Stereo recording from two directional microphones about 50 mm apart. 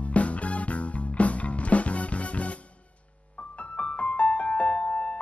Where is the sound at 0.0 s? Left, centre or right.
Left.